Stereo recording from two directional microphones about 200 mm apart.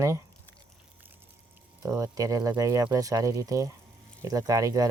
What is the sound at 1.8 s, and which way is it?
Speech, 15° right (ahead or behind).